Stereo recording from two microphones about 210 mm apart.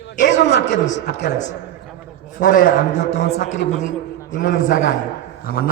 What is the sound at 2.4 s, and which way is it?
Speech, 55° left (ahead or behind).